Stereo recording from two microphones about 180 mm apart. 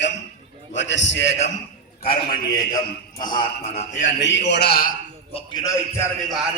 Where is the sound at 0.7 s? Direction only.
90° left.